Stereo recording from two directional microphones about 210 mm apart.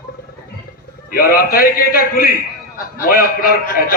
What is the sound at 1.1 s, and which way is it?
A man's voice, 45° left (ahead or behind).